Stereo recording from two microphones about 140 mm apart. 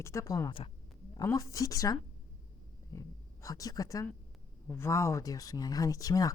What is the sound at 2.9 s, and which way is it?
Speech, 25° left (ahead or behind).